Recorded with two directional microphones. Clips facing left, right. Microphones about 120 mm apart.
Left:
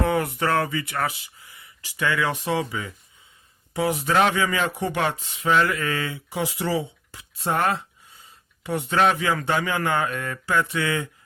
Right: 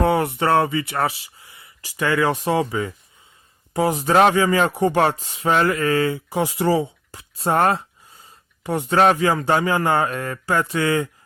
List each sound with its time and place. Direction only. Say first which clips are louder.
0.0 s speech: right 4 dB; 25° right (ahead or behind)